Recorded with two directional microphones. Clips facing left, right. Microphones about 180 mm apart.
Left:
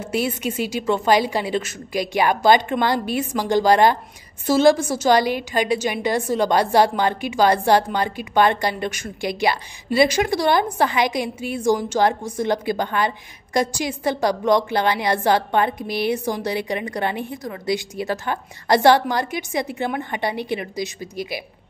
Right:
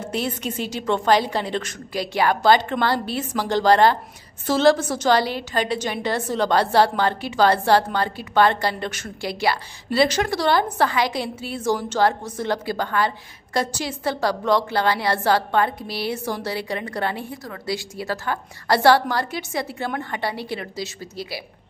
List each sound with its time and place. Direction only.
0.0 s a woman's voice: 10° left (ahead or behind)